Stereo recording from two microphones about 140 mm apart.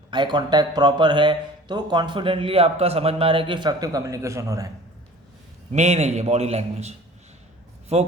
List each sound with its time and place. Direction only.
0.1 s speech: 35° right (ahead or behind)
5.7 s a man's voice: 55° right (ahead or behind)